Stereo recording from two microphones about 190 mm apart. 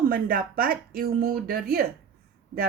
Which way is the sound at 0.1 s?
50° right (ahead or behind).